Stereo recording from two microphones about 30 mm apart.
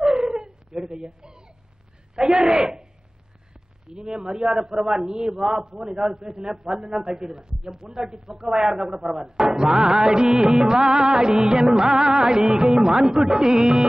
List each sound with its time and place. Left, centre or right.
0.0 s dog: right
2.1 s speech: right